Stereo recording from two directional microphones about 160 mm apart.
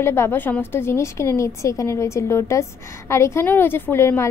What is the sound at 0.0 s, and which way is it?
A woman's voice, 15° left (ahead or behind).